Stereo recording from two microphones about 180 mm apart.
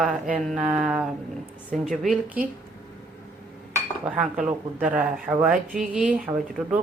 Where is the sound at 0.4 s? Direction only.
5° right (ahead or behind).